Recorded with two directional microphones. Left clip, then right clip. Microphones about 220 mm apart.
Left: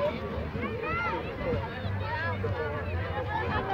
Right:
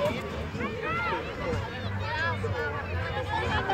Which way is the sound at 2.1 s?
50° right (ahead or behind).